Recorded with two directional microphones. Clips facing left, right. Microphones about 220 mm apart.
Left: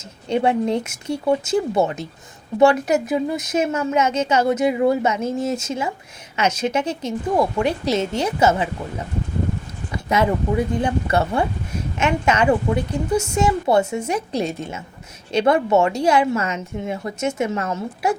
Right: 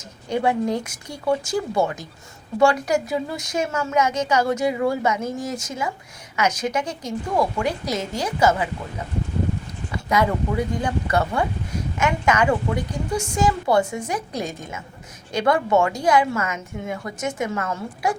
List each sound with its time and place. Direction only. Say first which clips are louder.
0.3 s a woman's voice: left 3 dB; 25° left (ahead or behind)
9.9 s a woman's voice: left 2 dB; 25° left (ahead or behind)